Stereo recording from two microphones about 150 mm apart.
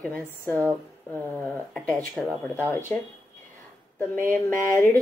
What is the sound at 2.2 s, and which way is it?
Speech, 5° left (ahead or behind).